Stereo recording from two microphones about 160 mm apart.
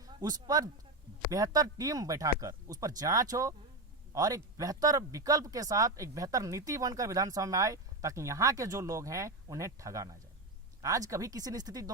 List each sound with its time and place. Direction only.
0.0 s speech: 25° right (ahead or behind)